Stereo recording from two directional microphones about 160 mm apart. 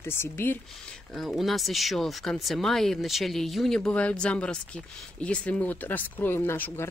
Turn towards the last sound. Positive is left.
turn(degrees=15)  # may be behind; listen again after turning